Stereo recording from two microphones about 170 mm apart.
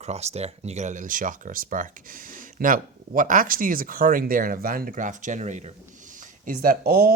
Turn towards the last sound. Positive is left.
turn(degrees=-60)  # may be behind; listen again after turning